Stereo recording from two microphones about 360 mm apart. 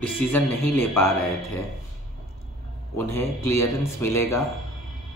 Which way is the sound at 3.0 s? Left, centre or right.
Centre.